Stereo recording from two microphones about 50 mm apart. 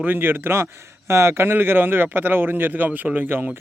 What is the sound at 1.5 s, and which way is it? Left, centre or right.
A man's voice, right.